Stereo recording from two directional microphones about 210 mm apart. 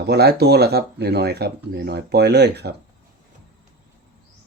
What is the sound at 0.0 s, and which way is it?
Speech, 50° right (ahead or behind).